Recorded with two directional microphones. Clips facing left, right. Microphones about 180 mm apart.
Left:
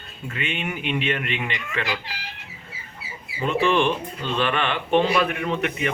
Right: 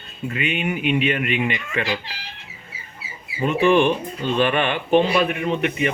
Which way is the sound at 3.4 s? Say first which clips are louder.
Right 4 dB; 15° right (ahead or behind).